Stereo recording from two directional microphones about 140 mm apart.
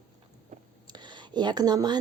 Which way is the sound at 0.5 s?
60° right (ahead or behind).